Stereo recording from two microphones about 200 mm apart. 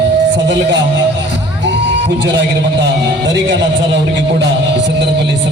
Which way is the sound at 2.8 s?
60° right (ahead or behind).